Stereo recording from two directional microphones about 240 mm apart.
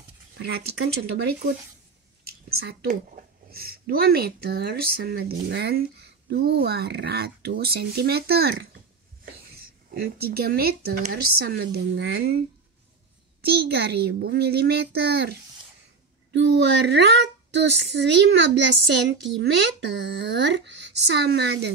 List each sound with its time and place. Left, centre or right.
0.4 s speech: right
2.2 s a sound: right
3.5 s speech: right
9.8 s speech: right
13.4 s speech: right
16.3 s speech: right